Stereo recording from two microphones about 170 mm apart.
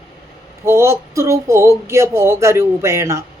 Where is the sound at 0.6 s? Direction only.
15° right (ahead or behind).